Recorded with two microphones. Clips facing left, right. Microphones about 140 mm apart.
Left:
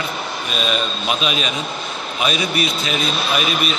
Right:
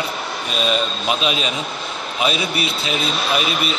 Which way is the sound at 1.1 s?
30° right (ahead or behind).